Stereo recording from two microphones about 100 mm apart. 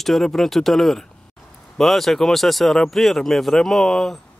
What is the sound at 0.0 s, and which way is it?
Speech, 5° left (ahead or behind).